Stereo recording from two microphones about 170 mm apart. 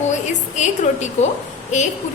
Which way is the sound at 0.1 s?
45° left (ahead or behind).